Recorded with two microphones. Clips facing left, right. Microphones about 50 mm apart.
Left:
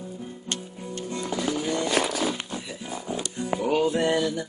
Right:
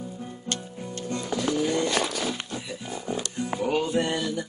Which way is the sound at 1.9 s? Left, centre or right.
Centre.